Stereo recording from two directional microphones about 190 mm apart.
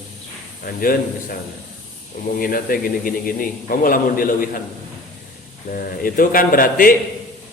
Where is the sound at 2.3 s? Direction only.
50° left (ahead or behind).